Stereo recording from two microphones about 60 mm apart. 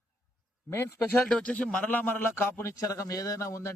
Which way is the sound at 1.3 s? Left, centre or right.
Centre.